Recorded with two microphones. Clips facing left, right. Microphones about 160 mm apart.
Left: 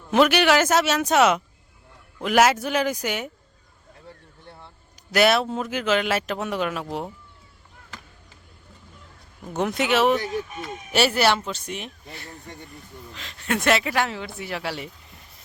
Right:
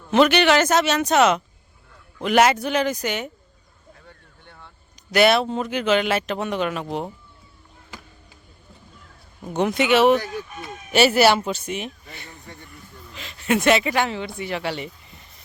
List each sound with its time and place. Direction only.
0.1 s speech: 5° left (ahead or behind)
4.4 s a sound: 30° left (ahead or behind)
5.1 s speech: centre (ahead or behind)
9.5 s speech: centre (ahead or behind)